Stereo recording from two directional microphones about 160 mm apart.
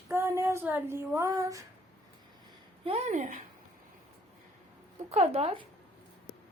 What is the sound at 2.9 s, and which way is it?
Speech, 45° right (ahead or behind).